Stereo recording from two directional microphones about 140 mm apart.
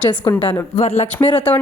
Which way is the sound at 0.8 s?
55° left (ahead or behind).